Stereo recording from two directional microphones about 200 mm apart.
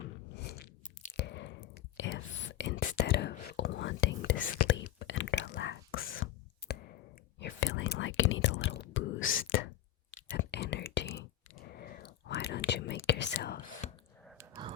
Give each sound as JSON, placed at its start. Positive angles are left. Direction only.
{"t": 0.4, "sound": "a sound", "side_deg": 55}
{"t": 1.1, "sound": "whispering", "side_deg": 60}
{"t": 7.3, "sound": "whispering", "side_deg": 65}
{"t": 10.3, "sound": "whispering", "side_deg": 60}